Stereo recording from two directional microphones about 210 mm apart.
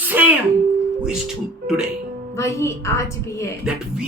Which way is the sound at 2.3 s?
15° left (ahead or behind).